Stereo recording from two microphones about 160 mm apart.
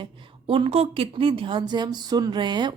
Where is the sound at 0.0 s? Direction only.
35° right (ahead or behind).